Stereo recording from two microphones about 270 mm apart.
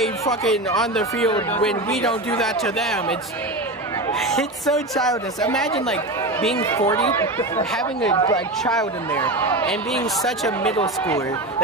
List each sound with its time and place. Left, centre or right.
0.3 s speech: centre
4.2 s speech: centre
8.6 s speech: centre